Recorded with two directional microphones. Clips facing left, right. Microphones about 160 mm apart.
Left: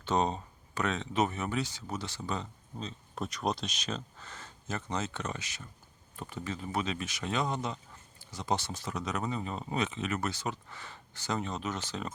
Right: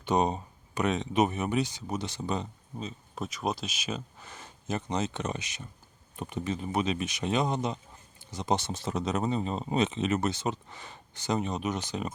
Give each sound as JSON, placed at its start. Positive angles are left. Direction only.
{"t": 0.0, "sound": "speech", "side_deg": -15}